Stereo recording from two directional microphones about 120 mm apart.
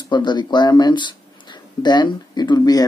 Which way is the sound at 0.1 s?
40° left (ahead or behind).